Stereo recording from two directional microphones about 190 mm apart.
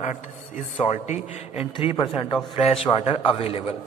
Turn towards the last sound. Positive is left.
turn(degrees=30)  # may be behind; listen again after turning